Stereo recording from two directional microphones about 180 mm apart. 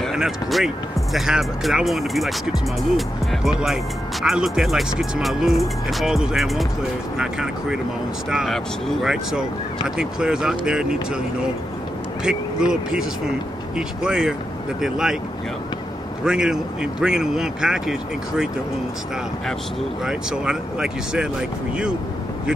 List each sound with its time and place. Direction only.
0.0 s speech: centre (ahead or behind)
12.3 s speech: 5° right (ahead or behind)
16.3 s speech: 5° right (ahead or behind)
20.1 s speech: 5° right (ahead or behind)